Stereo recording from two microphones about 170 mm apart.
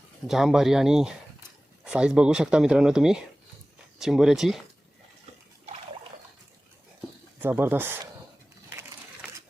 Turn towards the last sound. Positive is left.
turn(degrees=-10)  # may be behind; listen again after turning